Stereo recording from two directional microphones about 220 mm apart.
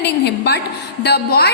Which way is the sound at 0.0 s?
50° left (ahead or behind).